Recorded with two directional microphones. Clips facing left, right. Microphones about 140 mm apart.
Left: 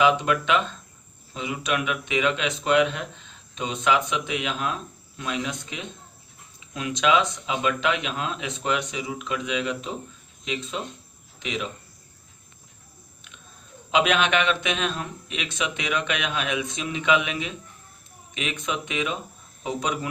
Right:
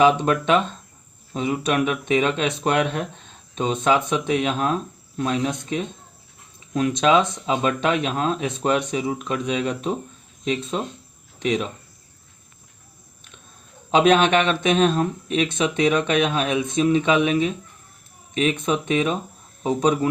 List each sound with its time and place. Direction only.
0.0 s speech: 40° right (ahead or behind)
13.9 s speech: 45° right (ahead or behind)